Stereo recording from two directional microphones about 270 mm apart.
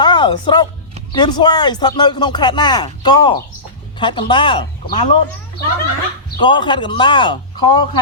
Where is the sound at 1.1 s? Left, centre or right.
Centre.